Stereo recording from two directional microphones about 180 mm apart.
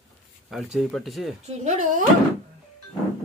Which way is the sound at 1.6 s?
40° right (ahead or behind).